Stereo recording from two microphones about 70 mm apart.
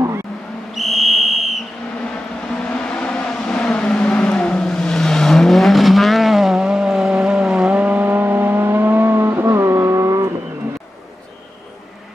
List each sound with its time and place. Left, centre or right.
0.7 s whistle: centre
2.7 s vehicle: centre
7.7 s vehicle: right